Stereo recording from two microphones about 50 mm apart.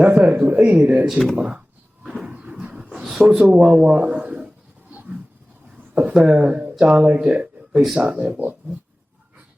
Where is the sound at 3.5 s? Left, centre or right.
Centre.